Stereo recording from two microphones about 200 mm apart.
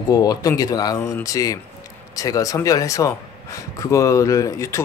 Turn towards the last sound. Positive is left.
turn(degrees=15)  # may be behind; listen again after turning